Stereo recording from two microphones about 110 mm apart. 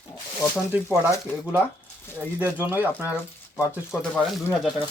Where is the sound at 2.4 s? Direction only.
15° right (ahead or behind).